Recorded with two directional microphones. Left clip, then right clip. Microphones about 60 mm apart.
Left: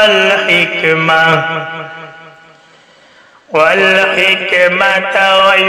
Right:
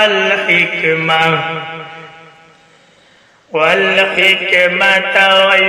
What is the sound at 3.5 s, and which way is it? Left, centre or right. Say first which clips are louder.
Mantra: left 3 dB; left.